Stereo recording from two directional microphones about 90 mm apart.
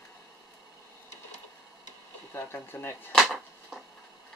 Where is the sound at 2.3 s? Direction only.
25° left (ahead or behind).